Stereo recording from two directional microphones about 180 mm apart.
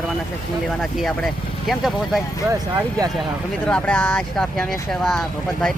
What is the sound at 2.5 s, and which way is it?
Speech, 15° right (ahead or behind).